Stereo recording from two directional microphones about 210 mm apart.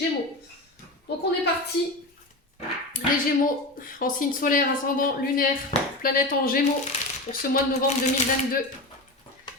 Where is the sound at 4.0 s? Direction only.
40° left (ahead or behind).